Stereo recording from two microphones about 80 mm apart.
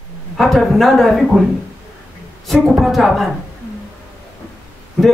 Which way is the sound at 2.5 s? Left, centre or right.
Centre.